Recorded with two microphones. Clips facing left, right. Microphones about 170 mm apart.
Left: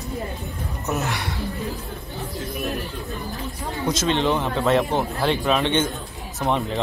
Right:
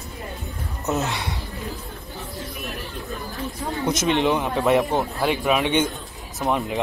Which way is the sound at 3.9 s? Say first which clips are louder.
Right 1 dB; 20° right (ahead or behind).